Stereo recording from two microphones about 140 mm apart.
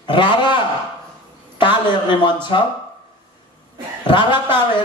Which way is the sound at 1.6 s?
35° left (ahead or behind).